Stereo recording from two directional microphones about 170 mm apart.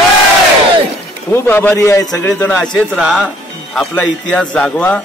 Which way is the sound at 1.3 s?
15° left (ahead or behind).